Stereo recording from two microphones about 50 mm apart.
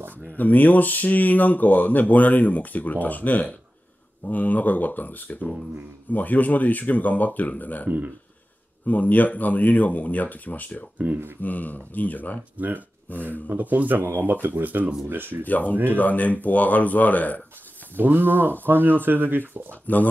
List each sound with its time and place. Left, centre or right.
0.3 s speech: left
12.5 s speech: right
13.1 s speech: left
13.5 s speech: right
14.0 s speech: right
15.0 s speech: right
15.4 s speech: left
15.7 s speech: right
16.0 s speech: left
17.9 s speech: right
19.7 s speech: left